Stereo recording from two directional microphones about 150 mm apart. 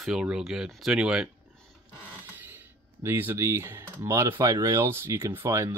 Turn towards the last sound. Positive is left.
turn(degrees=-20)  # may be behind; listen again after turning